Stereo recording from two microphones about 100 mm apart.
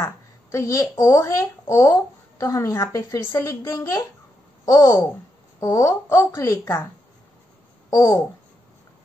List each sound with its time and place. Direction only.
0.0 s a woman's voice: 30° left (ahead or behind)
7.9 s speech: 30° left (ahead or behind)